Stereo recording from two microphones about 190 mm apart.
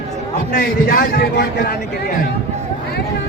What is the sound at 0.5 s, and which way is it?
A man's voice, 50° left (ahead or behind).